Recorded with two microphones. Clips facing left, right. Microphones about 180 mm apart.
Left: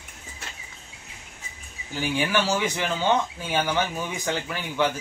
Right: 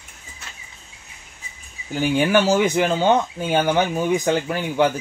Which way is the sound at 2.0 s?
50° right (ahead or behind).